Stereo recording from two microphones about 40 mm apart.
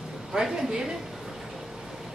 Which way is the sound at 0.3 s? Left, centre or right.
Centre.